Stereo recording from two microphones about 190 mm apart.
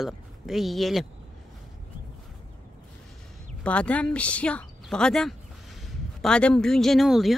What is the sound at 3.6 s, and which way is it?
A woman's voice, 5° left (ahead or behind).